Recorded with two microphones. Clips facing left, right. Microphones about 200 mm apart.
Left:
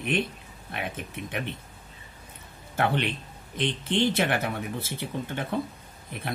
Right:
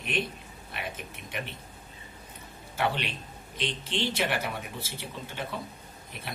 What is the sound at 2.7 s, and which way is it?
A man's voice, 55° left (ahead or behind).